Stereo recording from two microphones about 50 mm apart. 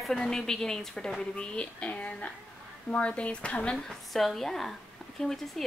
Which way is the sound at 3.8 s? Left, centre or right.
Centre.